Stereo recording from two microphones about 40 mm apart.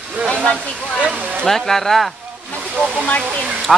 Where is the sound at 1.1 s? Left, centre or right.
Right.